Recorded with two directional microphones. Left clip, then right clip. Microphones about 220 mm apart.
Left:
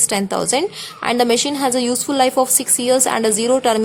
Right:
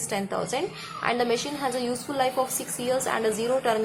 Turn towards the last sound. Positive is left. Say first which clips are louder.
# left 8 dB
turn(degrees=50)  # may be behind; listen again after turning